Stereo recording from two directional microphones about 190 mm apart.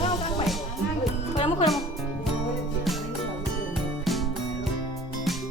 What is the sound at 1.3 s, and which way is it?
Speech, 30° left (ahead or behind).